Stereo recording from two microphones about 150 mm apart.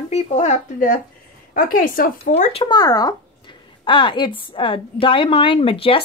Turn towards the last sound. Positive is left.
turn(degrees=35)  # may be behind; listen again after turning